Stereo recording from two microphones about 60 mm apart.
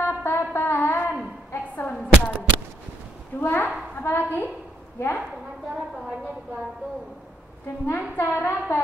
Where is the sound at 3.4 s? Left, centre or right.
Left.